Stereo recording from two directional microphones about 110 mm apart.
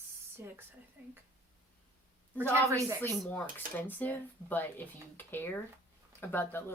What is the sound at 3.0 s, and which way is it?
Speech, 15° left (ahead or behind).